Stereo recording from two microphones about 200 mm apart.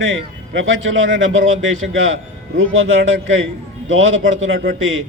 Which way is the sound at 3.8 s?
75° right (ahead or behind).